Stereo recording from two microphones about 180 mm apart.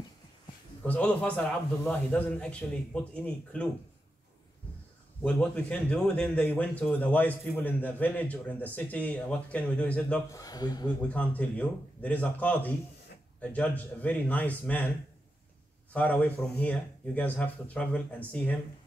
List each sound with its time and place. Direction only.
0.8 s a man's voice: 10° left (ahead or behind)
5.2 s a man's voice: 5° left (ahead or behind)
10.3 s speech: 20° left (ahead or behind)
11.1 s a man's voice: 10° left (ahead or behind)
15.9 s a man's voice: 10° left (ahead or behind)